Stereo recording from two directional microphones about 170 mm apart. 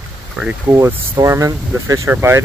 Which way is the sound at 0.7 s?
15° right (ahead or behind).